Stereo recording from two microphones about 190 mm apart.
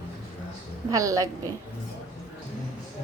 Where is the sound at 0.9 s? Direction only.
15° right (ahead or behind).